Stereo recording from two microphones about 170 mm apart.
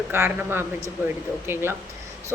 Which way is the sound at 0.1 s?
15° right (ahead or behind).